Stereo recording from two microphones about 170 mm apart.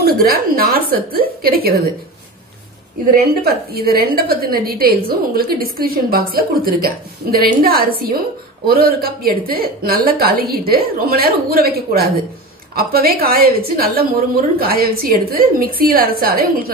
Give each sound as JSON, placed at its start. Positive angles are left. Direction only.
{"t": 0.0, "sound": "a woman's voice", "side_deg": -65}
{"t": 3.1, "sound": "a woman's voice", "side_deg": -60}